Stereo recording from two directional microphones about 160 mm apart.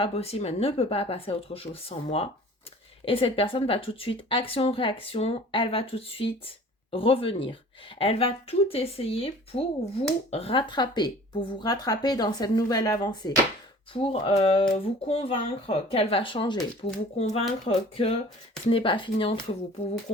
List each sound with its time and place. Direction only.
0.0 s a woman's voice: 40° left (ahead or behind)
16.8 s a woman's voice: 40° left (ahead or behind)